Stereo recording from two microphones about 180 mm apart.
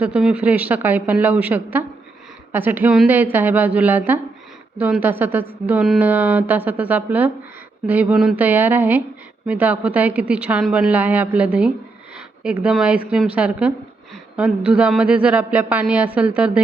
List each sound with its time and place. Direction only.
0.0 s a woman's voice: 5° right (ahead or behind)